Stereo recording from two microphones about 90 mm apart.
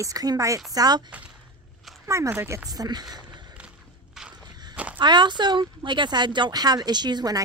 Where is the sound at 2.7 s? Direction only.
50° right (ahead or behind).